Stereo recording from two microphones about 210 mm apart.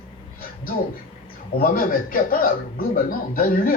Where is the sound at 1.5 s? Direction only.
45° left (ahead or behind).